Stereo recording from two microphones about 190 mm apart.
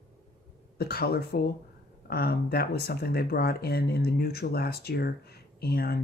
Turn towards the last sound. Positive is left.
turn(degrees=55)  # may be behind; listen again after turning